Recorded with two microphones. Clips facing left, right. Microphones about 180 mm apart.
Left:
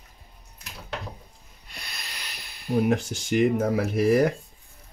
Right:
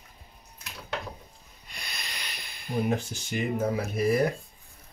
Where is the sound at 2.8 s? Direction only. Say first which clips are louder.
Left 4 dB; 90° left.